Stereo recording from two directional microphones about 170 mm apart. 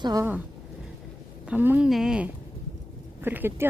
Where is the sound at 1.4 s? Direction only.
10° right (ahead or behind).